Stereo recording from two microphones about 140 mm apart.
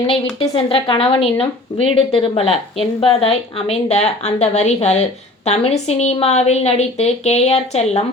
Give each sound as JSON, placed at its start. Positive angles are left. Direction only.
{"t": 0.1, "sound": "speech", "side_deg": 40}